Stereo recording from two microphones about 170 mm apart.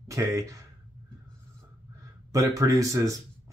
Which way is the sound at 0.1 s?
20° right (ahead or behind).